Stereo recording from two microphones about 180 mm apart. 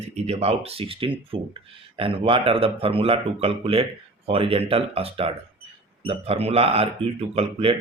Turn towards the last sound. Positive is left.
turn(degrees=-35)  # may be behind; listen again after turning